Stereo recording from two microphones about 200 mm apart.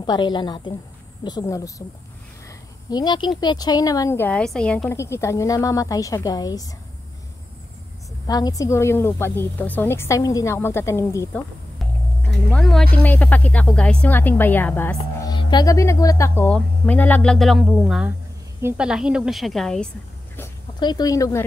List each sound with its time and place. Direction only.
0.0 s a woman's voice: 20° left (ahead or behind)
2.9 s speech: 20° left (ahead or behind)
8.3 s speech: 20° left (ahead or behind)
12.2 s speech: 5° left (ahead or behind)
15.2 s a woman's voice: 20° left (ahead or behind); by 19.9 s centre (ahead or behind)
20.8 s speech: 20° left (ahead or behind)